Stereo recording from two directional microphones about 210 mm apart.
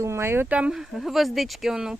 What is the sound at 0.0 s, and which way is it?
Speech, 10° right (ahead or behind).